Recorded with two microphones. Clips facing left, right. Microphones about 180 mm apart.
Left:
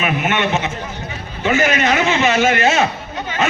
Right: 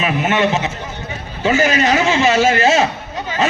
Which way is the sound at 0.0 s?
35° right (ahead or behind).